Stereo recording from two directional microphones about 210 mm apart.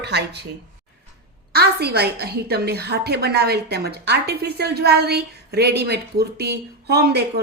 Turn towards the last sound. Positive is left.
turn(degrees=-50)  # may be behind; listen again after turning